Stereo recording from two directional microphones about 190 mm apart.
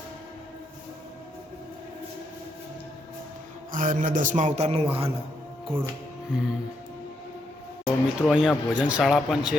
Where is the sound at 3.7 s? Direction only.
45° right (ahead or behind).